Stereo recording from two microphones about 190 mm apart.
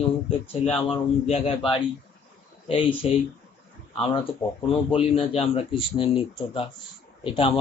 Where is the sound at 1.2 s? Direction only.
30° left (ahead or behind).